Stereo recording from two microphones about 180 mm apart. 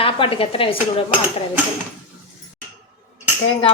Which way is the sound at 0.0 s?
30° left (ahead or behind).